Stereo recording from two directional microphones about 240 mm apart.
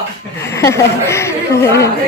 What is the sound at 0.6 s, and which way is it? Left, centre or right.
Speech, centre.